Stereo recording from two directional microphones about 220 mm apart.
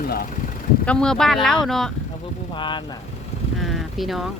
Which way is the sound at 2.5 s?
20° left (ahead or behind).